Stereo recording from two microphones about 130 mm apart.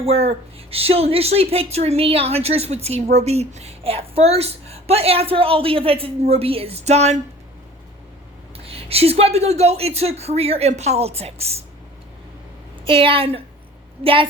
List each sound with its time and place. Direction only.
0.0 s speech: 50° right (ahead or behind)
8.5 s speech: 50° right (ahead or behind)
12.8 s speech: 45° right (ahead or behind)